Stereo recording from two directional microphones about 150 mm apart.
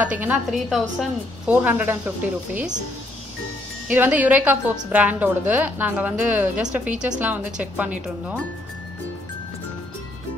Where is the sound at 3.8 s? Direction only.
10° right (ahead or behind).